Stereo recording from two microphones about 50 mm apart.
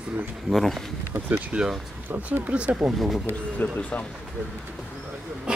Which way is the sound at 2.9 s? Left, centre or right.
Centre.